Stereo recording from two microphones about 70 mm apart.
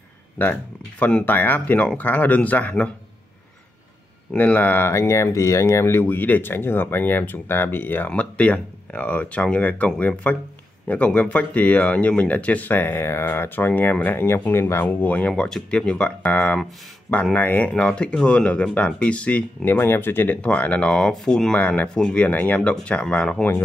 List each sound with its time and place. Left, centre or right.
0.4 s speech: left
4.3 s speech: left
8.1 s speech: centre
17.6 s speech: centre
19.6 s speech: left
20.4 s speech: centre
20.9 s speech: centre
21.5 s speech: left
21.8 s speech: centre